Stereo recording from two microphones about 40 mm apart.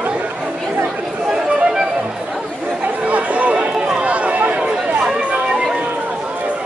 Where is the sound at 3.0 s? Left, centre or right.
Right.